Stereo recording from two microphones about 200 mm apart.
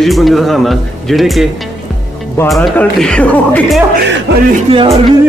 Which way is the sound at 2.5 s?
Centre (ahead or behind).